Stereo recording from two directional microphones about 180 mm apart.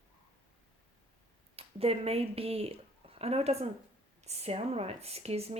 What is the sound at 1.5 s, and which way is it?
Speech, 35° right (ahead or behind).